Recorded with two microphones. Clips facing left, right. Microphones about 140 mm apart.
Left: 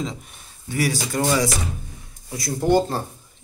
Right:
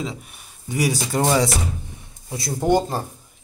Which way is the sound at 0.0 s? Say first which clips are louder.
Even; 5° right (ahead or behind).